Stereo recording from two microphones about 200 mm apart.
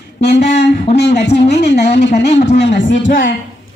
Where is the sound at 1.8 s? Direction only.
35° left (ahead or behind).